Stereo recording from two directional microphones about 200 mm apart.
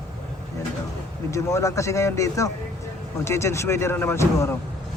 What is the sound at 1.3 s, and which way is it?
Speech, 15° left (ahead or behind).